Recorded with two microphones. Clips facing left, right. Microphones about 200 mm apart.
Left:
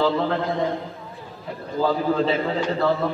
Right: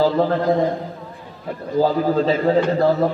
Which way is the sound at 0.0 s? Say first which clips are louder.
Right 4 dB; 40° right (ahead or behind).